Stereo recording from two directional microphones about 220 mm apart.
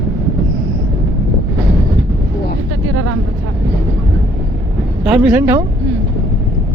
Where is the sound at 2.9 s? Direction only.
75° right (ahead or behind).